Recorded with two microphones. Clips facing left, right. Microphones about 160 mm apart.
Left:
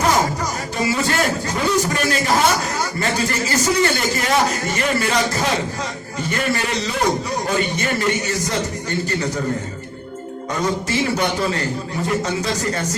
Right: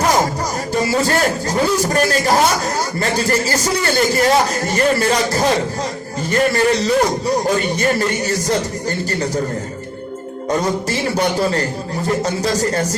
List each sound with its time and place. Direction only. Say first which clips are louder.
4.1 s a man's voice: right 4 dB; 35° right (ahead or behind)
12.2 s a man's voice: right 4 dB; 35° right (ahead or behind)